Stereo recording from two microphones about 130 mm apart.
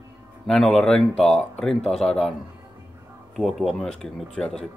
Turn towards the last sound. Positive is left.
turn(degrees=5)  # may be behind; listen again after turning